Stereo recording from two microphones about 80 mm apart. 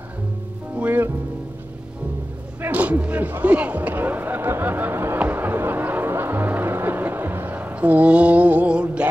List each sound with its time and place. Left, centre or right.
0.7 s speech: right
2.6 s speech: centre
5.2 s music: right